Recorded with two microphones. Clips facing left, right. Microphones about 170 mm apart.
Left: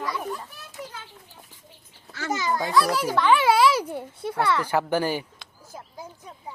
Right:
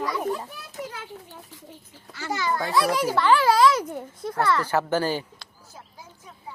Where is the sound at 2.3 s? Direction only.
15° left (ahead or behind).